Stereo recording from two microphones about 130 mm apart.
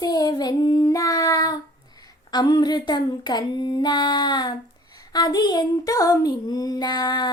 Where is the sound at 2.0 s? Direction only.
30° left (ahead or behind).